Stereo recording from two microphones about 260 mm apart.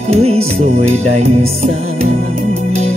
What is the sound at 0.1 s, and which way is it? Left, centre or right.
Music, right.